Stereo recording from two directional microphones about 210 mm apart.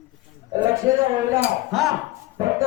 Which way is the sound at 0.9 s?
15° right (ahead or behind).